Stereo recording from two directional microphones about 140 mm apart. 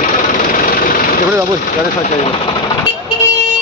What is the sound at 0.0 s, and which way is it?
Engine, 70° left (ahead or behind).